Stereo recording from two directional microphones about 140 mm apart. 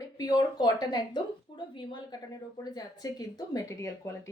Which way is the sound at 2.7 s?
25° left (ahead or behind).